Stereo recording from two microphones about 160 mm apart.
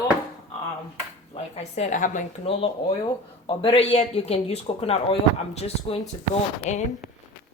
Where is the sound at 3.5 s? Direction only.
35° left (ahead or behind).